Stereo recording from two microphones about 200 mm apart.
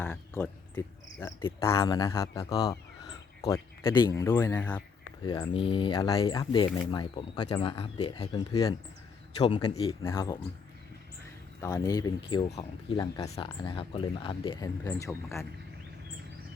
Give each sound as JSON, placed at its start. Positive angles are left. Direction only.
{"t": 0.0, "sound": "speech", "side_deg": 5}
{"t": 5.2, "sound": "speech", "side_deg": 20}
{"t": 10.0, "sound": "speech", "side_deg": 15}
{"t": 11.6, "sound": "speech", "side_deg": 15}